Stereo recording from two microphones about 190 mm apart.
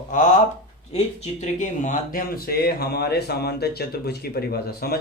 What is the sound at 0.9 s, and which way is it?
Speech, 35° left (ahead or behind).